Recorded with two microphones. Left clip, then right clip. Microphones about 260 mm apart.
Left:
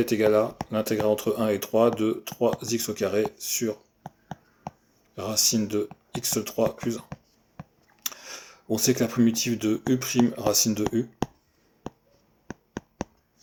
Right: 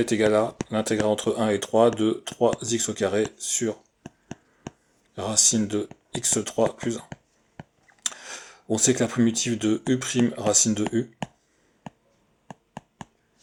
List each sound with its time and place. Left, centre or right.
0.0 s speech: right
5.1 s speech: right
8.0 s speech: right